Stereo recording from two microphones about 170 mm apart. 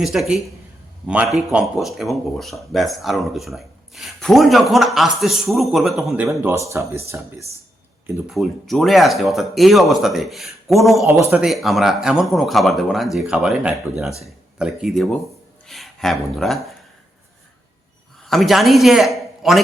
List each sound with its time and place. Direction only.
0.0 s speech: centre (ahead or behind)
6.4 s speech: 15° right (ahead or behind)
8.3 s speech: centre (ahead or behind)
11.0 s speech: 15° right (ahead or behind)
18.3 s a man's voice: centre (ahead or behind)